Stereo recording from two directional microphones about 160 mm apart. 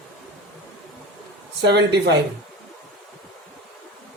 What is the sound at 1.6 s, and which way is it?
Speech, 90° right.